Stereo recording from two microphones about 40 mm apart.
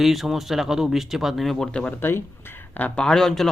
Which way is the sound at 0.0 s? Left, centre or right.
Centre.